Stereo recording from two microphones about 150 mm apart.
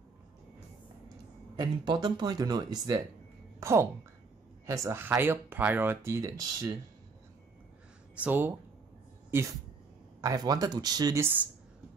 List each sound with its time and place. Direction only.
1.6 s a woman's voice: 30° right (ahead or behind)
8.2 s speech: 10° right (ahead or behind)
10.2 s speech: 25° right (ahead or behind)